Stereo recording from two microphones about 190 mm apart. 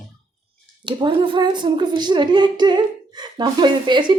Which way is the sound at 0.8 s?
25° right (ahead or behind).